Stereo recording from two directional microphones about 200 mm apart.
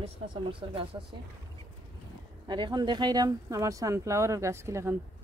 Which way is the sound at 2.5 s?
25° right (ahead or behind).